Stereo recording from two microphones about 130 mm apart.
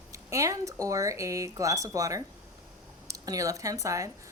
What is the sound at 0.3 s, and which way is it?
A woman's voice, 25° right (ahead or behind).